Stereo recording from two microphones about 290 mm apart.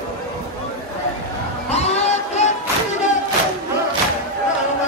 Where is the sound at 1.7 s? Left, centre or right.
Left.